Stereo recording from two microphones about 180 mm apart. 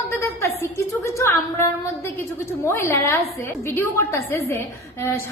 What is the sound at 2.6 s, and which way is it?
A woman's voice, 15° left (ahead or behind).